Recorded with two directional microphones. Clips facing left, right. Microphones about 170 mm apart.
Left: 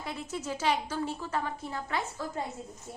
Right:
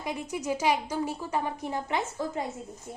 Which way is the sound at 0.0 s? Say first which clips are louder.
Right 4 dB; 15° right (ahead or behind).